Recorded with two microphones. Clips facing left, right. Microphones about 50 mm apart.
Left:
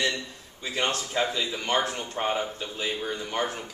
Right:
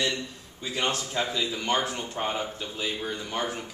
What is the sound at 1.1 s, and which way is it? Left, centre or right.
Speech, centre.